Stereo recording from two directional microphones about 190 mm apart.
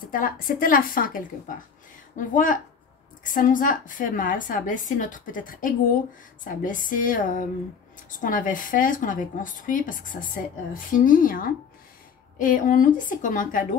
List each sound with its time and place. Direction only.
0.0 s a woman's voice: 45° left (ahead or behind)